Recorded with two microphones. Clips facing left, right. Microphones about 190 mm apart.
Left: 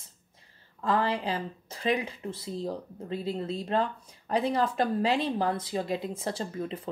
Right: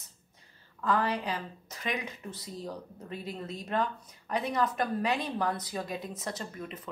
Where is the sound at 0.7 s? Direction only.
30° left (ahead or behind).